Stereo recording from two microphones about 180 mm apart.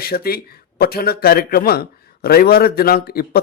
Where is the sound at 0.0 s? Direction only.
55° left (ahead or behind).